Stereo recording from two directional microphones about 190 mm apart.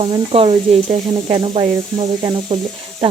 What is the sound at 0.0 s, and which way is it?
Sizzle, 30° right (ahead or behind).